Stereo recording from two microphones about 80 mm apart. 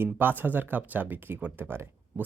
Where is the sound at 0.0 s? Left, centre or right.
Right.